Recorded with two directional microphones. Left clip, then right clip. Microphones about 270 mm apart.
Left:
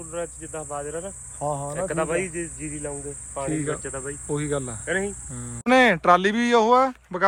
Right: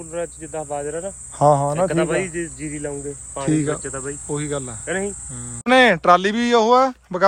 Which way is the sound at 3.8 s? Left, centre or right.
Right.